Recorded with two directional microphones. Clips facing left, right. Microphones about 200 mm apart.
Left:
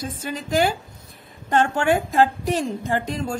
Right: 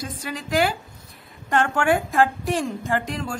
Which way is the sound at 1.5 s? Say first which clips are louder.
Left 1 dB; 20° left (ahead or behind).